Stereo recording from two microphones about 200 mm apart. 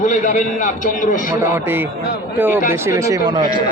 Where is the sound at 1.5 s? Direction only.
10° right (ahead or behind).